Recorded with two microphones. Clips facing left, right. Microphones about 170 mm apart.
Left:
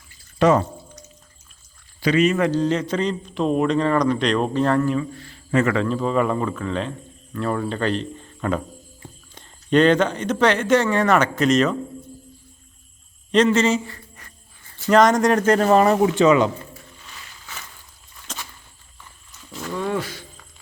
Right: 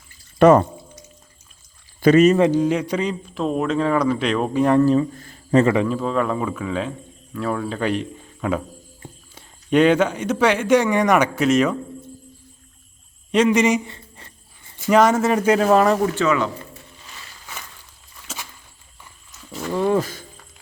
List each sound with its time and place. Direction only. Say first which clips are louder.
0.3 s speech: right 5 dB; 50° right (ahead or behind)
2.0 s speech: right 5 dB; 45° right (ahead or behind)
2.4 s a man's voice: right 3 dB; 10° right (ahead or behind)
4.8 s speech: right 5 dB; 35° right (ahead or behind)
5.9 s a man's voice: left 1 dB; centre (ahead or behind)
13.3 s speech: right 1 dB; 10° right (ahead or behind)
14.8 s a man's voice: even; 5° right (ahead or behind)
16.0 s speech: left 4 dB; 20° left (ahead or behind)
18.3 s a sound: even; 5° right (ahead or behind)
19.5 s a sound: right 4 dB; 5° right (ahead or behind)
19.7 s a sound: right 6 dB; 30° right (ahead or behind)